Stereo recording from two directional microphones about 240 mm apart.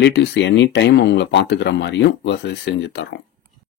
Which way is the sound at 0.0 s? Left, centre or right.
Left.